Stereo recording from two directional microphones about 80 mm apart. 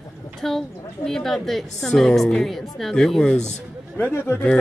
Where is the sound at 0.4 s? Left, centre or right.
Centre.